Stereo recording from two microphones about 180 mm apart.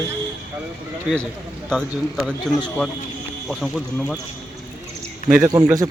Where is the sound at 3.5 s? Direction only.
Centre (ahead or behind).